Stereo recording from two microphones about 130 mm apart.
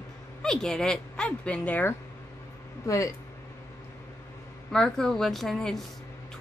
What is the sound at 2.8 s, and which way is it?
Speech, 25° left (ahead or behind).